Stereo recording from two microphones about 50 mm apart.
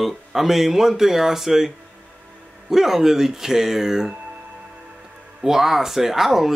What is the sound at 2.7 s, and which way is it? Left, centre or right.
Speech, centre.